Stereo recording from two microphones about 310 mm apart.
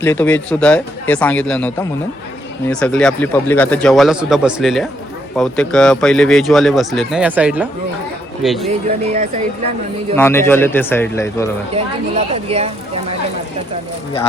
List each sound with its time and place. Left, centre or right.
0.0 s speech: centre
10.2 s a man's voice: centre
11.7 s speech: centre